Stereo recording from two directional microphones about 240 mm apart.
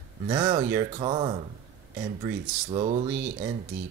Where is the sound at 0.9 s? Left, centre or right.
Right.